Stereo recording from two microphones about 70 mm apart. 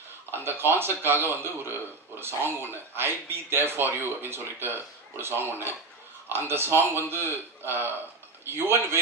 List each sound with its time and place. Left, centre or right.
0.3 s speech: right